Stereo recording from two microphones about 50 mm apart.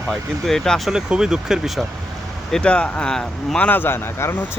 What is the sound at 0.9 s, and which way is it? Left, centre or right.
Speech, centre.